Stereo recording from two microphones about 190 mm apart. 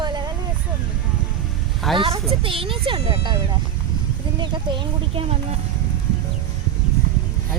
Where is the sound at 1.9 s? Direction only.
30° right (ahead or behind).